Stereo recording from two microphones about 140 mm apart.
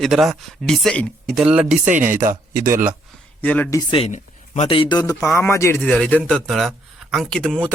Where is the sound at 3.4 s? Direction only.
10° left (ahead or behind).